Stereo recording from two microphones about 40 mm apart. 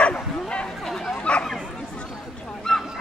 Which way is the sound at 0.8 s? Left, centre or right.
Centre.